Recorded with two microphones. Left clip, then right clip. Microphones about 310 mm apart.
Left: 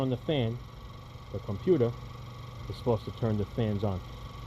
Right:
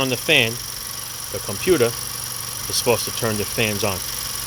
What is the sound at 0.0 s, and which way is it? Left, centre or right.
Speech, right.